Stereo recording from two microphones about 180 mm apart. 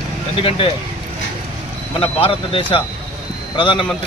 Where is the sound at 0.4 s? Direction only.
30° left (ahead or behind).